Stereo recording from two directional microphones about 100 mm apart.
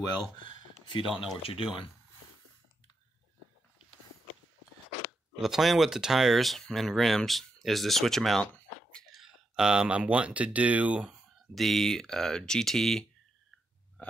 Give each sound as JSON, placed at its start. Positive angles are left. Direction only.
{"t": 0.4, "sound": "a sound", "side_deg": 50}
{"t": 1.4, "sound": "speech", "side_deg": 70}
{"t": 5.4, "sound": "speech", "side_deg": 0}